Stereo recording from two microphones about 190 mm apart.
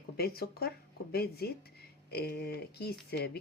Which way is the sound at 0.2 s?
55° left (ahead or behind).